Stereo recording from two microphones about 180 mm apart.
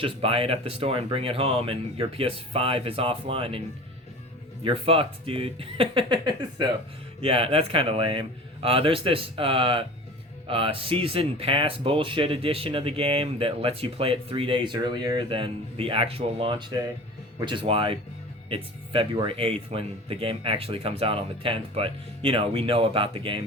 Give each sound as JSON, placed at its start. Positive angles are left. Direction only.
{"t": 0.0, "sound": "speech", "side_deg": -30}
{"t": 4.6, "sound": "speech", "side_deg": -30}